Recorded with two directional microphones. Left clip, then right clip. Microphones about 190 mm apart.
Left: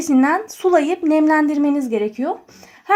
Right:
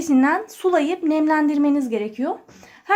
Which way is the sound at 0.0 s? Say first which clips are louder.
Left 2 dB; 35° left (ahead or behind).